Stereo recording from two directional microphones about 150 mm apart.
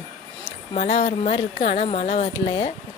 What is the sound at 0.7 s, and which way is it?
Speech, 40° left (ahead or behind).